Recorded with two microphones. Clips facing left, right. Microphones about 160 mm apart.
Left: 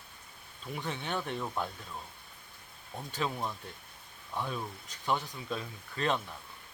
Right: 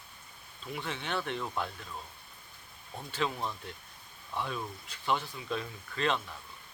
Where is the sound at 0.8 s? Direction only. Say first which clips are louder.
Even; 15° left (ahead or behind).